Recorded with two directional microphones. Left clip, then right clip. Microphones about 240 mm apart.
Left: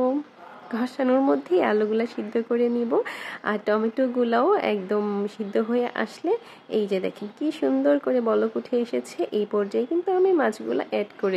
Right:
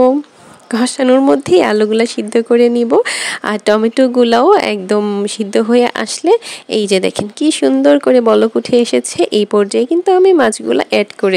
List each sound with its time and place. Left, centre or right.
0.7 s speech: right